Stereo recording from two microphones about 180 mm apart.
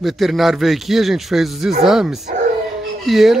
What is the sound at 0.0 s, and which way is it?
Speech, centre (ahead or behind).